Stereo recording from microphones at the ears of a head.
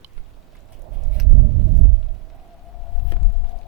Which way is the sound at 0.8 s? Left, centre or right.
Right.